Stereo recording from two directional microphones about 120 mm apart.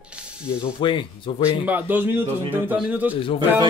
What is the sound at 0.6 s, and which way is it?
Speech, 40° left (ahead or behind).